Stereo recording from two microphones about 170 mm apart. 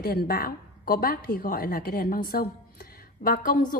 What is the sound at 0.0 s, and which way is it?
A woman's voice, 65° left (ahead or behind).